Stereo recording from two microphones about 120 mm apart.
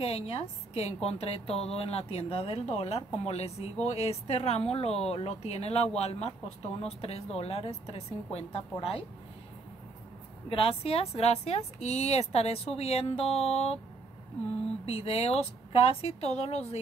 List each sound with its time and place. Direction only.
0.0 s a woman's voice: 55° left (ahead or behind)
10.5 s speech: 50° left (ahead or behind)
14.9 s speech: 55° left (ahead or behind)